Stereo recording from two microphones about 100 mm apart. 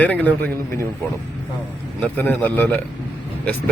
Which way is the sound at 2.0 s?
15° left (ahead or behind).